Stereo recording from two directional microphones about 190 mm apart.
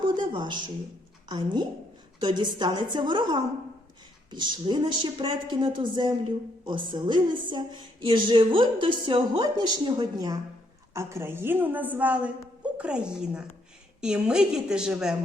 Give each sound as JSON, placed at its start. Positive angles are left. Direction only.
{"t": 0.2, "sound": "a woman's voice", "side_deg": -25}